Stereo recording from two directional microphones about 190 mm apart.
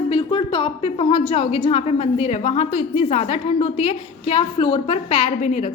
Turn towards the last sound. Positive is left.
turn(degrees=35)  # may be behind; listen again after turning